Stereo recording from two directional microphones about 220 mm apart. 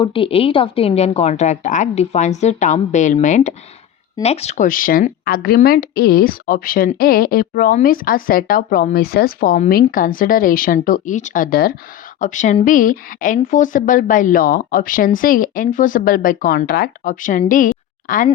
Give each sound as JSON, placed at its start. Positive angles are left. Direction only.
{"t": 0.0, "sound": "speech", "side_deg": 25}